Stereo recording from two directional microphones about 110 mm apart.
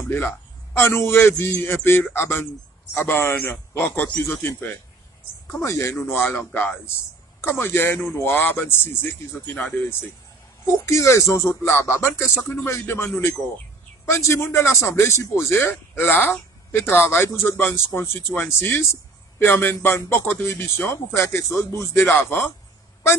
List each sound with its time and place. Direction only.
0.7 s a man's voice: 20° left (ahead or behind)
10.7 s a man's voice: 25° left (ahead or behind)